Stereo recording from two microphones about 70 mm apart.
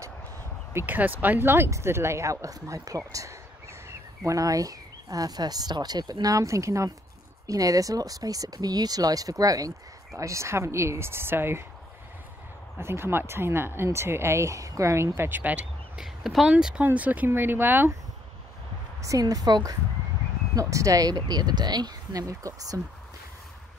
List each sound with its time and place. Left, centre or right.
0.8 s speech: right
3.1 s a sound: right
4.2 s speech: right
10.1 s speech: right
12.7 s speech: right
15.1 s speech: right
16.0 s speech: centre
16.8 s speech: right
18.9 s speech: right
20.5 s speech: right
22.3 s speech: right